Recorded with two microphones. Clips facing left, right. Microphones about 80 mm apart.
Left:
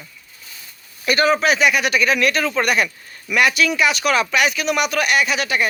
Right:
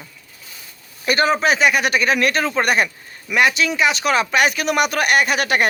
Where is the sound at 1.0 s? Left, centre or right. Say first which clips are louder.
Even; right.